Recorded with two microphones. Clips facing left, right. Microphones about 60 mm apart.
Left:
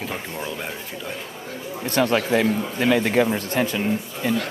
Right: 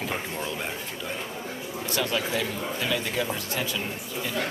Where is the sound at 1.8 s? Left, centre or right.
Left.